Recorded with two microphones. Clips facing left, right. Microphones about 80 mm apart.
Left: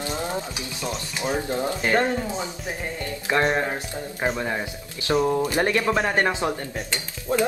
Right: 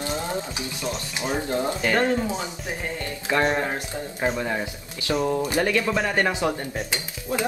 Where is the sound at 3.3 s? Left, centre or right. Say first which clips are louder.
Even; left.